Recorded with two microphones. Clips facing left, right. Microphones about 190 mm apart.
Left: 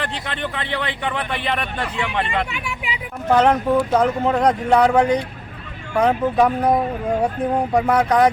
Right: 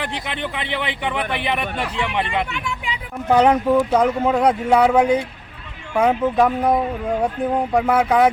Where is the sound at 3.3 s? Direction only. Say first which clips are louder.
Right 1 dB; 10° right (ahead or behind).